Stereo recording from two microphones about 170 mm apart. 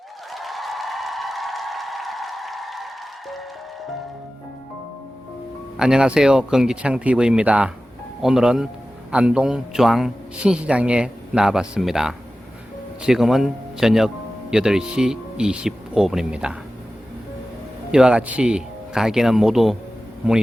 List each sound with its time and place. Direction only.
0.3 s applause: centre (ahead or behind)
5.7 s a man's voice: 5° right (ahead or behind)
17.9 s a man's voice: 5° right (ahead or behind)